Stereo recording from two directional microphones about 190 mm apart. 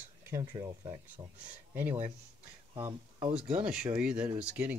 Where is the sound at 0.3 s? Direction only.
20° right (ahead or behind).